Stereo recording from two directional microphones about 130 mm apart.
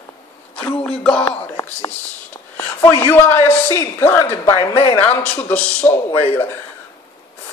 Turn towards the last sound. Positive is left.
turn(degrees=15)  # may be behind; listen again after turning